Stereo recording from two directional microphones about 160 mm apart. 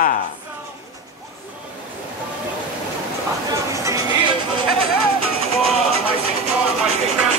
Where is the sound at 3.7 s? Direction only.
20° right (ahead or behind).